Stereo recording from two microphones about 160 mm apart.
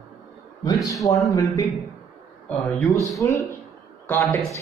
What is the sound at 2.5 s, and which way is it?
Speech, centre (ahead or behind).